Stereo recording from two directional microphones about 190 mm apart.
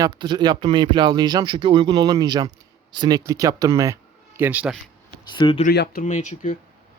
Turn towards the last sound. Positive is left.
turn(degrees=40)  # may be behind; listen again after turning